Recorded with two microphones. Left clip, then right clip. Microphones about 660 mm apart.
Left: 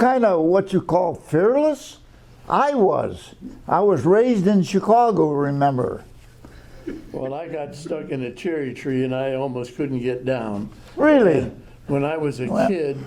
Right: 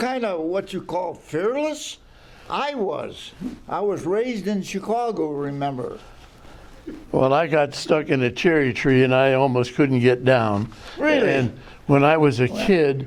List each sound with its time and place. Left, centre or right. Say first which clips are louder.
0.0 s speech: left 8 dB; left
7.2 s speech: right 11 dB; right
11.0 s speech: left 4 dB; left
11.9 s speech: right 6 dB; right